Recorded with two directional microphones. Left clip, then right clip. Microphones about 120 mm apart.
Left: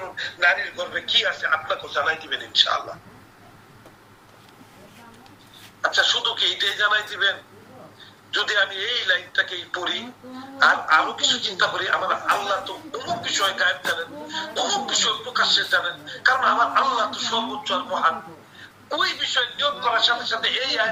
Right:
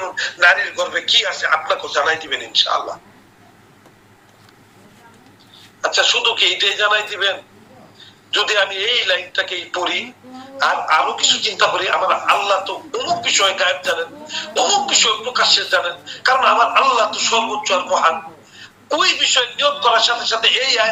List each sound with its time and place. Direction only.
0.0 s speech: 60° right (ahead or behind)
5.8 s speech: 60° right (ahead or behind)